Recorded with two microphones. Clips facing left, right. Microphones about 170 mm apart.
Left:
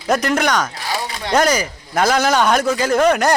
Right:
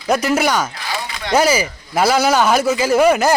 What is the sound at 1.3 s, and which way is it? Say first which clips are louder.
Speech: right 1 dB; 5° right (ahead or behind).